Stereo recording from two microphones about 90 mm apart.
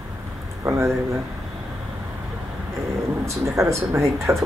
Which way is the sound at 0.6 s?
30° right (ahead or behind).